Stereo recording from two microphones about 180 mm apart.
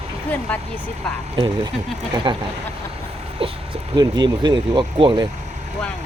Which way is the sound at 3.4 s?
30° right (ahead or behind).